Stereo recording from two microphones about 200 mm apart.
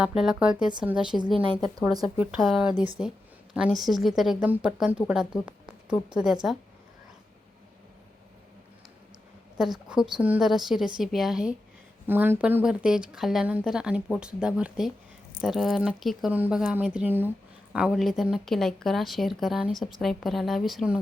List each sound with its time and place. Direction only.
0.0 s speech: centre (ahead or behind)
1.8 s speech: 20° right (ahead or behind)
2.1 s speech: 5° right (ahead or behind)
5.5 s a sound: 5° right (ahead or behind)
6.4 s speech: 5° right (ahead or behind)
9.6 s speech: 5° right (ahead or behind)